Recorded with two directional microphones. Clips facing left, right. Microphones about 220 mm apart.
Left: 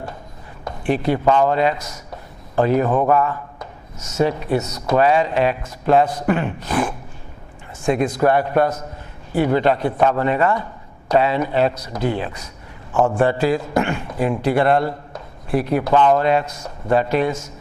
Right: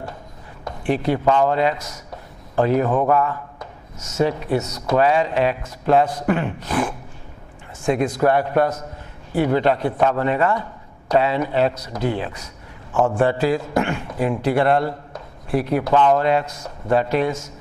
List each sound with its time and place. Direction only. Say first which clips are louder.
0.9 s a man's voice: left 1 dB; 15° left (ahead or behind)